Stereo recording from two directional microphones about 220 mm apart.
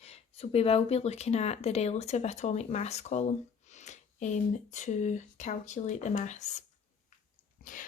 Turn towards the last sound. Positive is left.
turn(degrees=35)  # may be behind; listen again after turning